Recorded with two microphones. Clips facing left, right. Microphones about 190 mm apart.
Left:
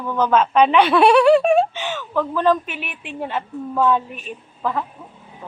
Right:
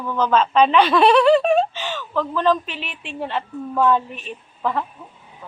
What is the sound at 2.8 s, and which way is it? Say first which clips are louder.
Speech: left 1 dB; 55° left (ahead or behind).